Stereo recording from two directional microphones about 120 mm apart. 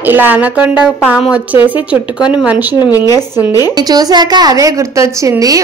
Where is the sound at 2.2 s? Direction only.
10° right (ahead or behind).